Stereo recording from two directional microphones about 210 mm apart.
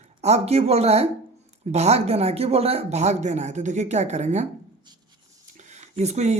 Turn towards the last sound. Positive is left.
turn(degrees=-30)  # may be behind; listen again after turning